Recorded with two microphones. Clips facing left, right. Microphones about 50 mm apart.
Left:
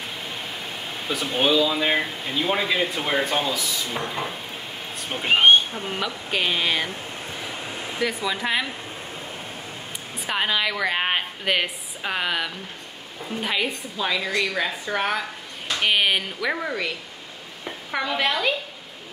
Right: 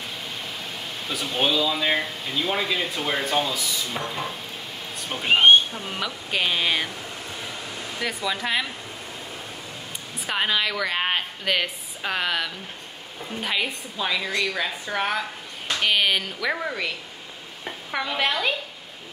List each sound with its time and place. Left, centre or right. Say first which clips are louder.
0.2 s speech: left 1 dB; centre
5.7 s speech: left 2 dB; left
5.9 s speech: even; centre
7.3 s a sound: left 3 dB; left
8.0 s speech: left 2 dB; centre
10.2 s a woman's voice: even; centre